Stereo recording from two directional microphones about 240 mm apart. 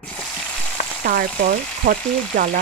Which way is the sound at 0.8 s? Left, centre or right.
Left.